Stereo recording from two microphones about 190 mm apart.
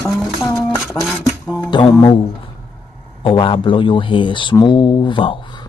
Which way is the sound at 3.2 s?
25° left (ahead or behind).